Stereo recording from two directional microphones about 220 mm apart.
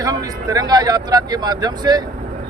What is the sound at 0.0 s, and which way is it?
Speech, 15° right (ahead or behind).